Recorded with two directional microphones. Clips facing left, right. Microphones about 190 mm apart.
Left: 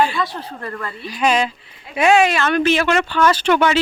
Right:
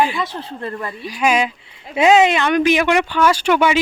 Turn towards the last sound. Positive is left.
turn(degrees=-10)  # may be behind; listen again after turning